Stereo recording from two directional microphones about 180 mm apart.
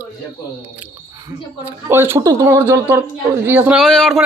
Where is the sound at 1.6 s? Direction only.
10° right (ahead or behind).